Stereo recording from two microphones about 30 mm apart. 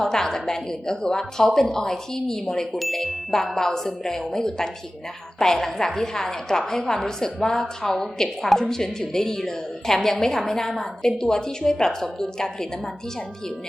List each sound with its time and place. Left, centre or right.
0.0 s a woman's voice: centre
2.7 s ding: centre
3.3 s a woman's voice: centre